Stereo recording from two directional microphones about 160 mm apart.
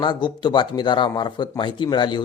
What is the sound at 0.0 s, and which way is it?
Speech, 30° left (ahead or behind).